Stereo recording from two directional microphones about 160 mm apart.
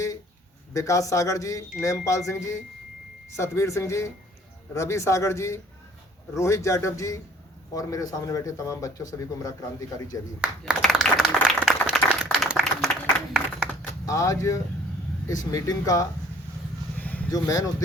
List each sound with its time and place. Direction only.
0.7 s a man's voice: 20° left (ahead or behind)
10.4 s applause: centre (ahead or behind)
14.0 s a man's voice: 20° left (ahead or behind)
17.0 s a sound: 10° left (ahead or behind)
17.3 s a man's voice: 20° left (ahead or behind)